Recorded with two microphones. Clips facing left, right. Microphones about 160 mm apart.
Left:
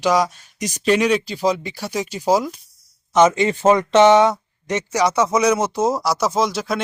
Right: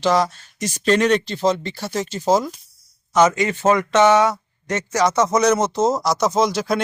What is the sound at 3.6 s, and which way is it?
Speech, 15° left (ahead or behind).